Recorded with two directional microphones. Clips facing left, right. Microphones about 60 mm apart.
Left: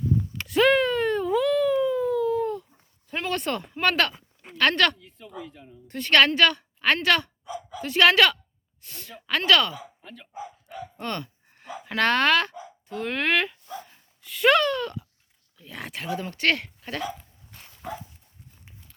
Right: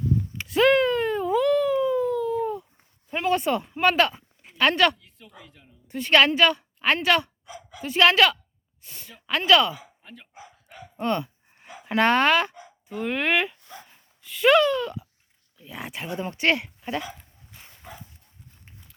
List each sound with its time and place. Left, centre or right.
0.4 s a sound: centre
3.1 s speech: centre
4.9 s a woman's voice: centre
16.1 s speech: right
17.8 s dog: left